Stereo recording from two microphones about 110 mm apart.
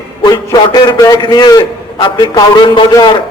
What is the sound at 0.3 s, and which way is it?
A man's voice, 35° left (ahead or behind).